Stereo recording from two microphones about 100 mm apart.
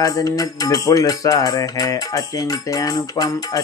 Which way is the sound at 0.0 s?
35° left (ahead or behind).